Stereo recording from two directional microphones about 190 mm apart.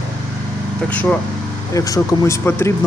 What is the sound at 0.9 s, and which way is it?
Speech, 10° left (ahead or behind).